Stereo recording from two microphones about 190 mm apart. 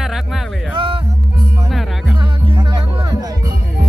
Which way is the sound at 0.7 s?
30° right (ahead or behind).